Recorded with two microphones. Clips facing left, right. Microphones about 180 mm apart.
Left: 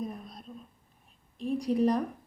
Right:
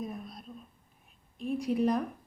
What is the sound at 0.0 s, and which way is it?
Whispering, 5° right (ahead or behind).